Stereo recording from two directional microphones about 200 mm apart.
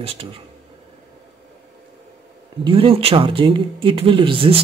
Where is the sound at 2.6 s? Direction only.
25° right (ahead or behind).